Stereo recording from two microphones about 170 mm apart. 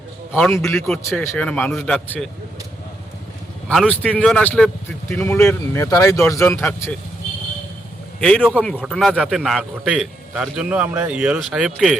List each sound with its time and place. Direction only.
0.5 s speech: 15° left (ahead or behind)
3.7 s speech: 5° left (ahead or behind)
8.2 s a man's voice: 5° left (ahead or behind)